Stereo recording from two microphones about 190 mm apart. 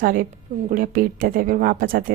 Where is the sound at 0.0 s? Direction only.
50° right (ahead or behind).